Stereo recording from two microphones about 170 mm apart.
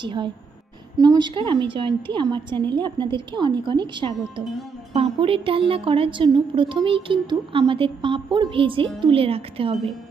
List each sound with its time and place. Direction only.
0.0 s a woman's voice: 30° right (ahead or behind)